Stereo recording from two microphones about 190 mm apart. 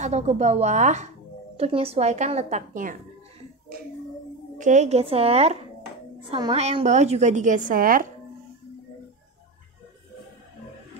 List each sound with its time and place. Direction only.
0.0 s a woman's voice: 35° right (ahead or behind)
4.6 s a woman's voice: 40° right (ahead or behind)